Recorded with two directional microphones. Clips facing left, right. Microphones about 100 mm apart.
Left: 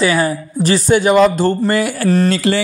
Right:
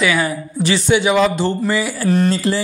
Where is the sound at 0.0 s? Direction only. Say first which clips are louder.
Left 3 dB; 35° left (ahead or behind); by 2.1 s 55° left (ahead or behind).